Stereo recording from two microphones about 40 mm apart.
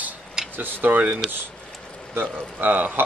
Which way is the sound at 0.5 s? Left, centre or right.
Right.